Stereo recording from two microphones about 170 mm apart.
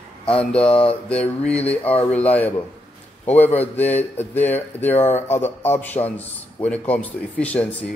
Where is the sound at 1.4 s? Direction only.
10° left (ahead or behind).